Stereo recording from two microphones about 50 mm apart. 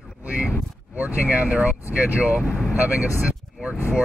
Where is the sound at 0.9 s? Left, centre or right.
Right.